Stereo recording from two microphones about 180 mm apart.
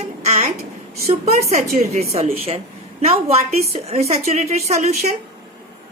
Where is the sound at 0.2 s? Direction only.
35° right (ahead or behind).